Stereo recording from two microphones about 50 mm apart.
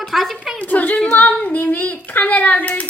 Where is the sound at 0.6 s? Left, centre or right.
Left.